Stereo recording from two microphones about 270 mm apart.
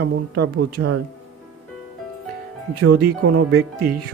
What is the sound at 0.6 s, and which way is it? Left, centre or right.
Speech, right.